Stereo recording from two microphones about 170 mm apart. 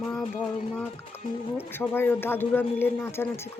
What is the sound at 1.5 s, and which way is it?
Speech, 10° left (ahead or behind).